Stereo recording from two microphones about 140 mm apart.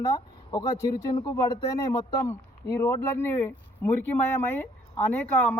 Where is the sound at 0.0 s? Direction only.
25° left (ahead or behind).